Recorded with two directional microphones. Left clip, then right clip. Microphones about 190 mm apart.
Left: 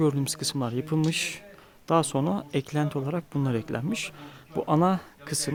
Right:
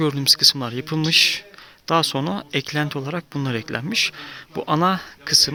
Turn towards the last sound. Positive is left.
turn(degrees=5)  # may be behind; listen again after turning